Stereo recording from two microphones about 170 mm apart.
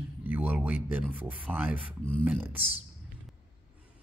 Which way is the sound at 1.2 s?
10° right (ahead or behind).